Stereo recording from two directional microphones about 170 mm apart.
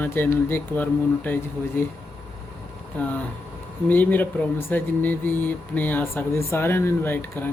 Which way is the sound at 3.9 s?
10° left (ahead or behind).